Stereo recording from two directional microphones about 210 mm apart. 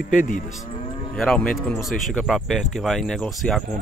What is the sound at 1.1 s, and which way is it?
Speech, centre (ahead or behind).